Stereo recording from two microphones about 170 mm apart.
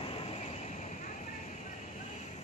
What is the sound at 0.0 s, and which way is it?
Vehicle, 35° left (ahead or behind).